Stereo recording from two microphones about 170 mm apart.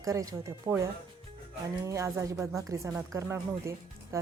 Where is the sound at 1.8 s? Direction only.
15° right (ahead or behind).